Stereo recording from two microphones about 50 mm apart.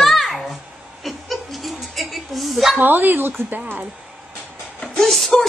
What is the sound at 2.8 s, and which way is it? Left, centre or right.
Speech, right.